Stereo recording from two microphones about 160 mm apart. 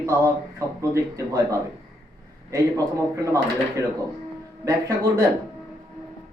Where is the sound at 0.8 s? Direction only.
20° right (ahead or behind).